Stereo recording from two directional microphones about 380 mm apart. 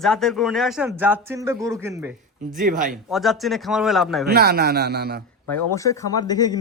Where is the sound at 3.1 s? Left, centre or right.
Centre.